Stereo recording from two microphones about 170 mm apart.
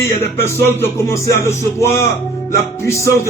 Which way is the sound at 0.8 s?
15° left (ahead or behind).